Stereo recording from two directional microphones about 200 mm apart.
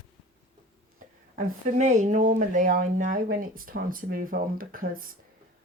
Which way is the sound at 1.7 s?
35° right (ahead or behind).